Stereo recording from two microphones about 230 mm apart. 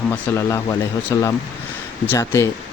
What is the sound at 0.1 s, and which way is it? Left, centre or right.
Speech, centre.